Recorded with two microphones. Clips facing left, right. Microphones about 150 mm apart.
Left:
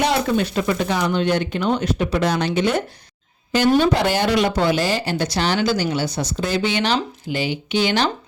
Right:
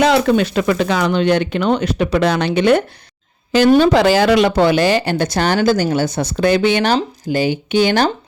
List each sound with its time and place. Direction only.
0.0 s speech: 90° right; by 2.8 s 65° right (ahead or behind)
3.5 s speech: 90° right; by 6.9 s 55° right (ahead or behind)
6.9 s speech: 40° right (ahead or behind)